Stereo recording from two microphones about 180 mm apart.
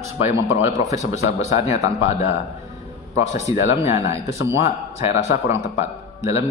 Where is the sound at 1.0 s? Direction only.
40° left (ahead or behind).